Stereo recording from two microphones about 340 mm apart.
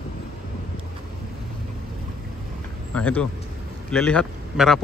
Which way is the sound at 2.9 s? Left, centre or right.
Centre.